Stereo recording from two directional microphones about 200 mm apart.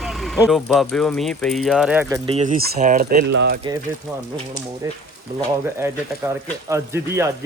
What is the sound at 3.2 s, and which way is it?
Speech, 60° right (ahead or behind).